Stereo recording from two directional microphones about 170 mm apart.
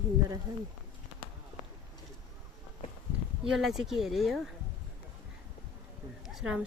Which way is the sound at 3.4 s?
5° right (ahead or behind).